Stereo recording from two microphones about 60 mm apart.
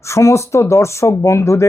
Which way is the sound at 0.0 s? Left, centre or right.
Left.